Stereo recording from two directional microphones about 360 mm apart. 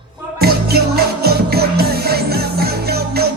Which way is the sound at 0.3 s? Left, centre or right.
Right.